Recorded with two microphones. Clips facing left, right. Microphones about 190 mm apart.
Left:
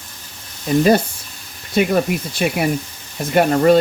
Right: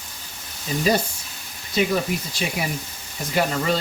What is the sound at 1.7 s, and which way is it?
Speech, 55° left (ahead or behind).